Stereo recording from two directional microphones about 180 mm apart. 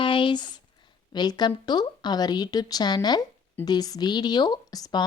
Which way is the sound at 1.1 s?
25° left (ahead or behind).